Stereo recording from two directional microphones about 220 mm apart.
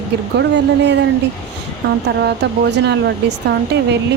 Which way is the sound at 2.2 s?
50° right (ahead or behind).